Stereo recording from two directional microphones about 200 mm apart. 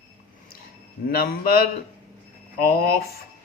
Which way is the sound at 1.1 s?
50° left (ahead or behind).